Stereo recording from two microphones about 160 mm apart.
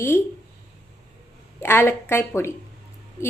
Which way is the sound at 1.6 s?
15° left (ahead or behind).